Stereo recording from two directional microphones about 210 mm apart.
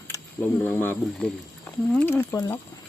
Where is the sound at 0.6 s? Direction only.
10° left (ahead or behind).